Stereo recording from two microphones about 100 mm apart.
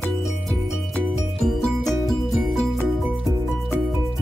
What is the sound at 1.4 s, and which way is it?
Music, centre (ahead or behind).